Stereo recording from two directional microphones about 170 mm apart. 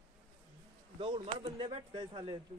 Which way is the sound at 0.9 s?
35° right (ahead or behind).